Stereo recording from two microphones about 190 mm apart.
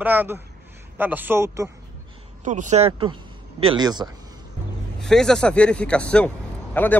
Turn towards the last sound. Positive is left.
turn(degrees=10)  # may be behind; listen again after turning